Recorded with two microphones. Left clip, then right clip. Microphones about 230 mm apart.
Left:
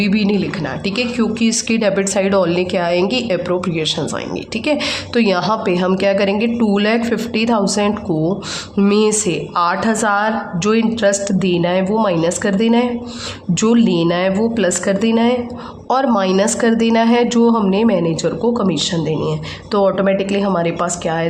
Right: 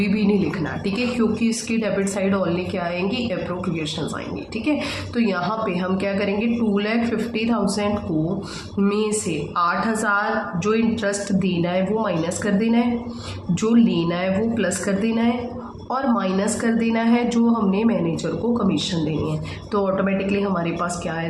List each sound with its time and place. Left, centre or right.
0.0 s a woman's voice: left
5.1 s a woman's voice: left